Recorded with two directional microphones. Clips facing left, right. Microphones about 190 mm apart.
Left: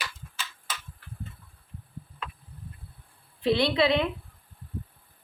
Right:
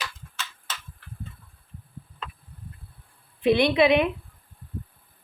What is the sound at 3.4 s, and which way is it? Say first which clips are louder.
Speech: right 4 dB; 20° right (ahead or behind).